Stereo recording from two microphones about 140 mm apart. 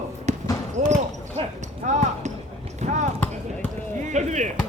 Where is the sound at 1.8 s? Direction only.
60° right (ahead or behind).